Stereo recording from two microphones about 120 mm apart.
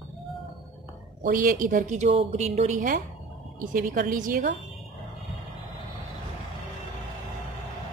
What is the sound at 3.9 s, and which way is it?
Speech, 90° right.